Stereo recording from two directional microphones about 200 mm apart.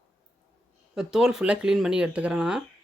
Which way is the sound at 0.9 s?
5° right (ahead or behind).